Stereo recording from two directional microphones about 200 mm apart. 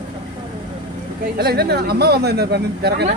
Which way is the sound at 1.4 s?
55° right (ahead or behind).